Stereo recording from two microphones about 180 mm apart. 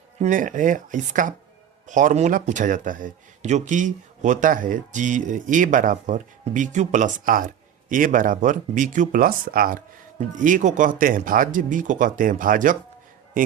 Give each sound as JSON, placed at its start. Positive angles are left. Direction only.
{"t": 0.2, "sound": "speech", "side_deg": -45}